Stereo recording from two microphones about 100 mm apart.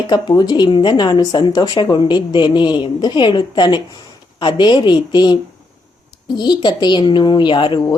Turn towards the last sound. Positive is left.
turn(degrees=55)  # may be behind; listen again after turning